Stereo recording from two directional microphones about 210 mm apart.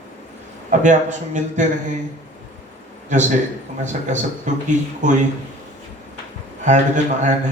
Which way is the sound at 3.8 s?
35° right (ahead or behind).